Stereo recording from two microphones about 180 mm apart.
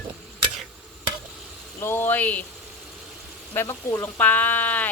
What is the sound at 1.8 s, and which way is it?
Speech, 10° left (ahead or behind).